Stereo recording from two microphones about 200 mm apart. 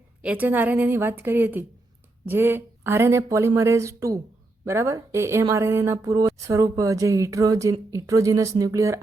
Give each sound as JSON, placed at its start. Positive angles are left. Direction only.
{"t": 0.2, "sound": "speech", "side_deg": -5}